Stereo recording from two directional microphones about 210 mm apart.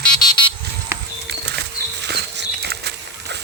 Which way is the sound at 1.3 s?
55° right (ahead or behind).